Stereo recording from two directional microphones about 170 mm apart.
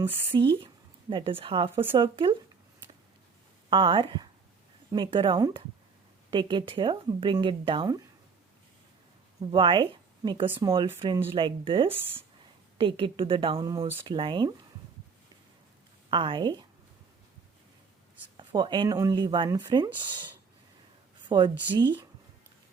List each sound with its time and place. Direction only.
0.3 s speech: 30° right (ahead or behind)
3.7 s speech: 30° right (ahead or behind)
9.4 s a woman's voice: 30° right (ahead or behind)
16.0 s a woman's voice: 30° right (ahead or behind)
18.3 s speech: 25° right (ahead or behind)
21.2 s speech: 25° right (ahead or behind)